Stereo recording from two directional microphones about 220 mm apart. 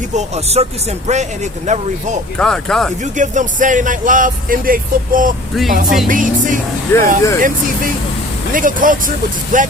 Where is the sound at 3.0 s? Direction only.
35° right (ahead or behind).